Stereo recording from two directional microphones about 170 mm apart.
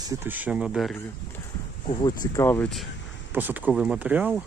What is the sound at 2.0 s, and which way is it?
Speech, 20° left (ahead or behind).